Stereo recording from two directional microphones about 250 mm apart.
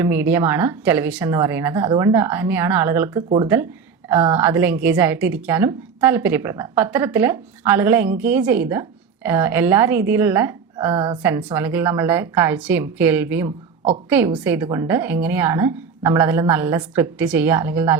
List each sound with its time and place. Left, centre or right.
0.0 s speech: centre
10.9 s a woman's voice: right
11.2 s speech: centre